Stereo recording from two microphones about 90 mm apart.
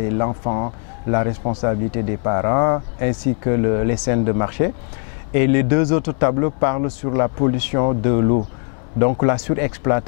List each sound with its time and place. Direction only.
0.0 s speech: 20° left (ahead or behind)